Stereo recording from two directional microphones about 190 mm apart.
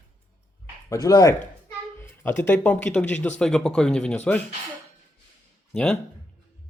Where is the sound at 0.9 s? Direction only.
20° left (ahead or behind).